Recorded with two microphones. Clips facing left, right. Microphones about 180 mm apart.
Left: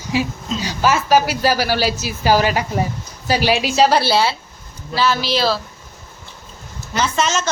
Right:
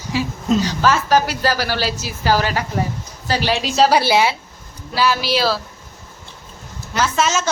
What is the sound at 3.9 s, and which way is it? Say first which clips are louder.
A woman's voice: right 1 dB; 15° right (ahead or behind).